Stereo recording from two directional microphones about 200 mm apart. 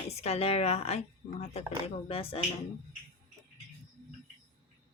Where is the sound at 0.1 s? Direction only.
30° left (ahead or behind).